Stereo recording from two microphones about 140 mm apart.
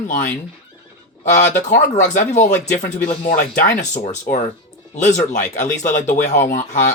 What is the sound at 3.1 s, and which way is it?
Speech, 45° left (ahead or behind).